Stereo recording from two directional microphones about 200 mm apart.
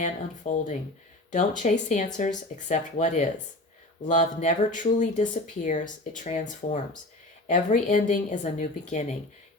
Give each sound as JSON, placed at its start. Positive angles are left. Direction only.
{"t": 0.0, "sound": "speech", "side_deg": 40}